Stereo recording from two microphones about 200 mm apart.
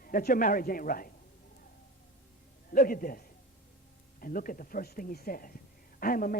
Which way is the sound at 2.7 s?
45° left (ahead or behind).